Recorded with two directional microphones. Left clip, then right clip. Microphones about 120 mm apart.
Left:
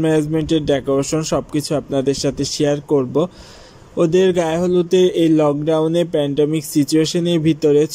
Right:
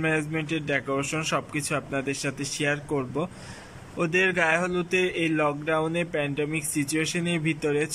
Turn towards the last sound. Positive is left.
turn(degrees=35)  # may be behind; listen again after turning